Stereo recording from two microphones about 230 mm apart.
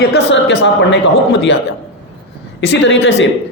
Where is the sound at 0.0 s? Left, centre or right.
Left.